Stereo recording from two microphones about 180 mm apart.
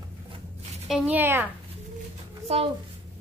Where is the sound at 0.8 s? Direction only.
5° right (ahead or behind).